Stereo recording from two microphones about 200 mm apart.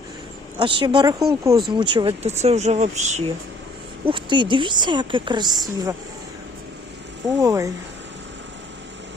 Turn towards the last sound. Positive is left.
turn(degrees=-15)  # may be behind; listen again after turning